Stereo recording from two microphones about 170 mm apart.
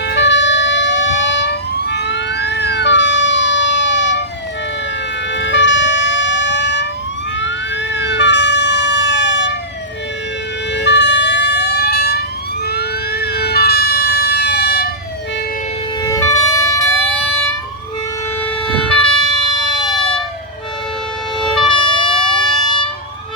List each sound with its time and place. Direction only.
0.0 s emergency vehicle: 80° left
5.3 s emergency vehicle: 90° left
7.9 s emergency vehicle: 90° left
10.7 s emergency vehicle: 90° left; by 14.8 s 70° left (ahead or behind)
16.0 s emergency vehicle: 20° left (ahead or behind)
18.4 s emergency vehicle: 5° left (ahead or behind)
21.6 s emergency vehicle: 30° left (ahead or behind)
22.6 s vehicle: 30° left (ahead or behind)